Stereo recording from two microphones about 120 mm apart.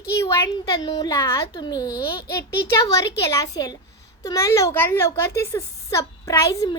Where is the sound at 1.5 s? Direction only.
35° left (ahead or behind).